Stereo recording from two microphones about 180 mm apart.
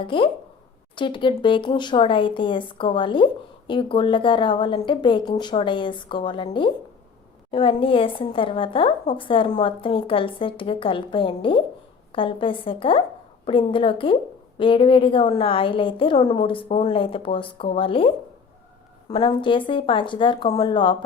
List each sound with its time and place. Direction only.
0.0 s a woman's voice: 30° left (ahead or behind)